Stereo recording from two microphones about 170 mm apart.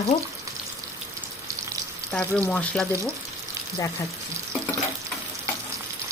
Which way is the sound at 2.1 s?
5° left (ahead or behind).